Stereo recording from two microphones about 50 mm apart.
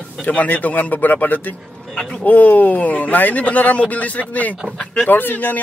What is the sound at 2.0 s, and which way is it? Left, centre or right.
Speech, centre.